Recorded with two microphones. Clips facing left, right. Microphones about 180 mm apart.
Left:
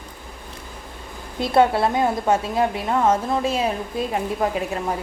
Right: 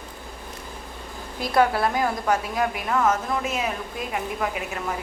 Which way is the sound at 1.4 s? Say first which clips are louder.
Left 3 dB; 25° left (ahead or behind).